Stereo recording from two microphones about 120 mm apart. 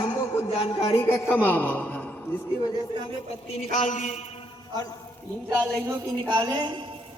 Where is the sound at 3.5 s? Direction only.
80° left.